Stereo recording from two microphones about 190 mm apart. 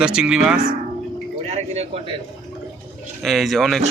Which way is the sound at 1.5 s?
35° right (ahead or behind).